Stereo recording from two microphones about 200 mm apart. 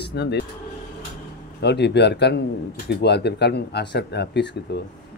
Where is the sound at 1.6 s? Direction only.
55° left (ahead or behind).